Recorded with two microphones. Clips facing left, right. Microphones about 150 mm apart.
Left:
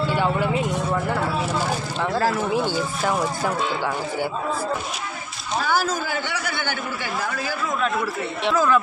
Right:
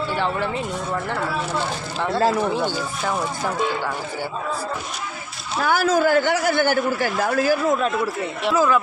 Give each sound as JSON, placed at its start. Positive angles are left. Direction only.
{"t": 0.1, "sound": "speech", "side_deg": 10}
{"t": 2.6, "sound": "speech", "side_deg": 5}
{"t": 5.6, "sound": "a man's voice", "side_deg": -55}
{"t": 8.4, "sound": "speech", "side_deg": -10}